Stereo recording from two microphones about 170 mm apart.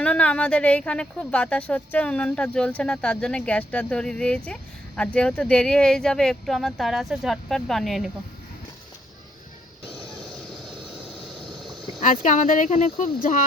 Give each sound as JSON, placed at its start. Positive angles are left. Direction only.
{"t": 0.0, "sound": "a woman's voice", "side_deg": 5}
{"t": 9.9, "sound": "vehicle", "side_deg": 0}
{"t": 12.2, "sound": "speech", "side_deg": 50}